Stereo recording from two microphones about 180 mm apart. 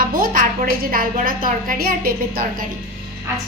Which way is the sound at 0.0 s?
50° right (ahead or behind).